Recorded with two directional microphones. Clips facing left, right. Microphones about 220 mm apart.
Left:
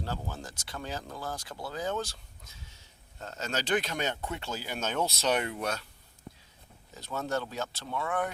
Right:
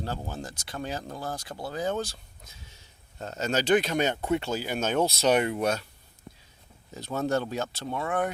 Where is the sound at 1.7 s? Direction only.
15° right (ahead or behind).